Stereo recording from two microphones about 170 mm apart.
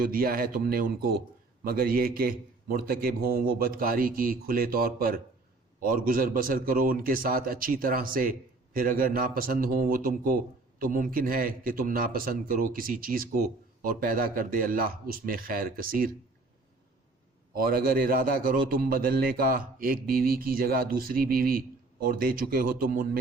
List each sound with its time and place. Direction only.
0.0 s a man's voice: 60° right (ahead or behind)
17.5 s a man's voice: 60° right (ahead or behind)